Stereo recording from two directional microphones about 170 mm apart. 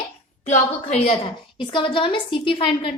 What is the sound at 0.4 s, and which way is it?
A woman's voice, 45° left (ahead or behind).